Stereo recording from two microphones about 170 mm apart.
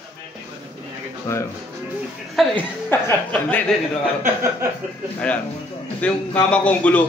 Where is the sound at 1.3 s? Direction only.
15° left (ahead or behind).